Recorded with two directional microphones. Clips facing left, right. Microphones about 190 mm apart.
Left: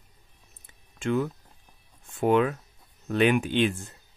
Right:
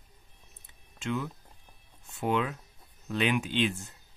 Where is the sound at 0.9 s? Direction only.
50° left (ahead or behind).